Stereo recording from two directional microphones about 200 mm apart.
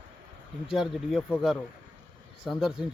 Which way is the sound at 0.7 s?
Centre (ahead or behind).